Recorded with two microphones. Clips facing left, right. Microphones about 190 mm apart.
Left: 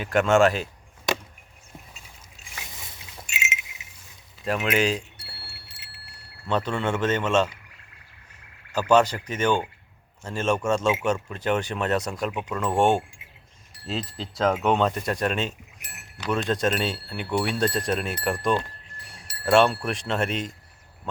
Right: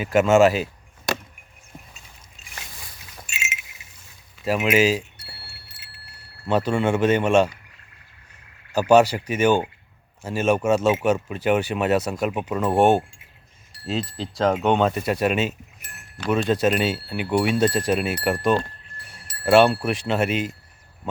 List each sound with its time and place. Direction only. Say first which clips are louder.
0.0 s speech: right 3 dB; 5° right (ahead or behind)
2.7 s wind chime: even; 20° left (ahead or behind)
4.4 s speech: right 4 dB; 5° right (ahead or behind)
5.1 s wind chime: right 1 dB; 30° left (ahead or behind)
6.5 s speech: right 5 dB; 10° right (ahead or behind)
8.7 s speech: right 4 dB; 10° right (ahead or behind)